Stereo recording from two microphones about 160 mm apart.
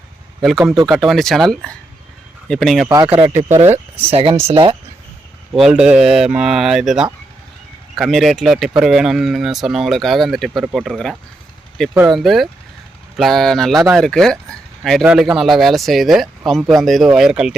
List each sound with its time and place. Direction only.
0.9 s speech: centre (ahead or behind)
3.1 s speech: 35° right (ahead or behind)
3.7 s speech: 15° right (ahead or behind)
4.1 s speech: 35° right (ahead or behind)
5.5 s speech: 5° right (ahead or behind)